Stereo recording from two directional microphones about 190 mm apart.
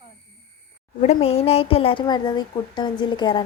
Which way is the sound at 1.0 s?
35° left (ahead or behind).